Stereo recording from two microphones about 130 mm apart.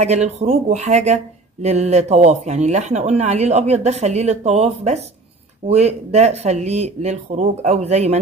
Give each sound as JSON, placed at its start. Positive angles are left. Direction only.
{"t": 0.0, "sound": "speech", "side_deg": -55}